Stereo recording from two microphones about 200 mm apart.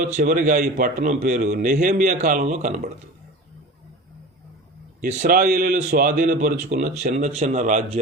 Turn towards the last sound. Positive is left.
turn(degrees=-40)  # may be behind; listen again after turning